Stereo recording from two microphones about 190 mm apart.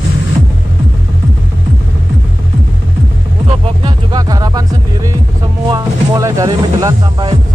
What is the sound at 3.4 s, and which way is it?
Music, 20° right (ahead or behind).